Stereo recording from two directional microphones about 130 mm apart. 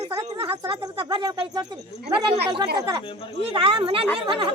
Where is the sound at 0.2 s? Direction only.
45° right (ahead or behind).